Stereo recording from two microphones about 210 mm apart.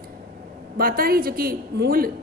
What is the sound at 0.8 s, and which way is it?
A woman's voice, 45° right (ahead or behind).